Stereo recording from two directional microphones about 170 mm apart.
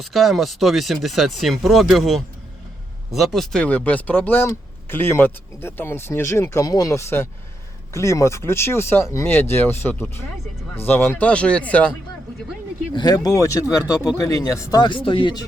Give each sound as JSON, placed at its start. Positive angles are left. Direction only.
{"t": 0.0, "sound": "speech", "side_deg": 0}
{"t": 12.9, "sound": "speech", "side_deg": 25}